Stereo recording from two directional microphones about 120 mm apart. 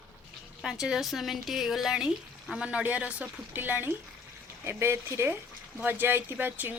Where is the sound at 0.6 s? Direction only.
5° right (ahead or behind).